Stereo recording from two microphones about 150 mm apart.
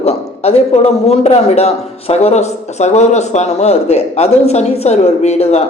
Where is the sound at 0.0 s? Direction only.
45° left (ahead or behind).